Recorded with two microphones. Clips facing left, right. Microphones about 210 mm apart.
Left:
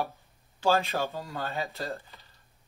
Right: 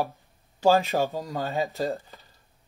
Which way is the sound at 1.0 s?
45° right (ahead or behind).